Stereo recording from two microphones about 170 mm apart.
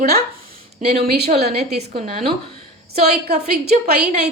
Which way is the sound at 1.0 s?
70° right (ahead or behind).